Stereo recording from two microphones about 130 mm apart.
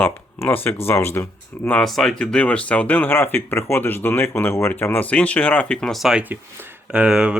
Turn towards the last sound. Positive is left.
turn(degrees=-5)  # may be behind; listen again after turning